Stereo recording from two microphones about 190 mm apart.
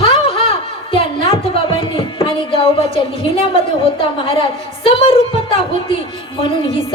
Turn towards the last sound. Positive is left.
turn(degrees=25)  # may be behind; listen again after turning